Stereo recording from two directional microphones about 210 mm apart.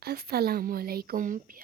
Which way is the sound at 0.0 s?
50° right (ahead or behind).